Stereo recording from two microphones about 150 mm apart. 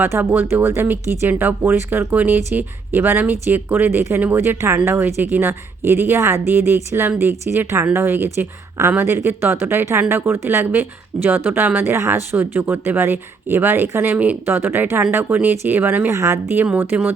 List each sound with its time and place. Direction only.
0.0 s a woman's voice: 15° right (ahead or behind)